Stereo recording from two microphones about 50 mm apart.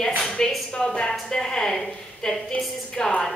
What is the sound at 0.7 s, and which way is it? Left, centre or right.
A woman's voice, centre.